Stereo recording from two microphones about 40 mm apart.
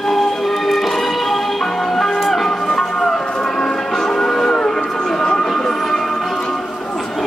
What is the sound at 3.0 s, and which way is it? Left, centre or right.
Music, centre.